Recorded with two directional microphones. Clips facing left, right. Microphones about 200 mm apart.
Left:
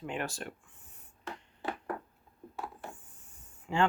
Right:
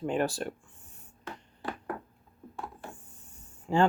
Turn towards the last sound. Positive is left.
turn(degrees=-40)  # may be behind; listen again after turning